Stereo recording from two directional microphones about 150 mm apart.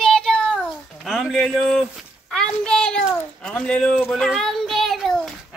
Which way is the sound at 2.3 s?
5° left (ahead or behind).